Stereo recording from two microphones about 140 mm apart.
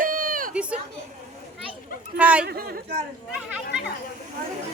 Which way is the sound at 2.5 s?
90° right.